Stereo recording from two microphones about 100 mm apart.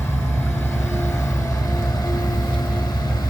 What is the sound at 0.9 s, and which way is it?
Vehicle, 25° left (ahead or behind).